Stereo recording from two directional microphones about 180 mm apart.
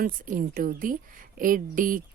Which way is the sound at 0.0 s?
50° right (ahead or behind).